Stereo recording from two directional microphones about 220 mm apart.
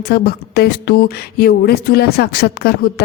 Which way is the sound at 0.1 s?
45° left (ahead or behind).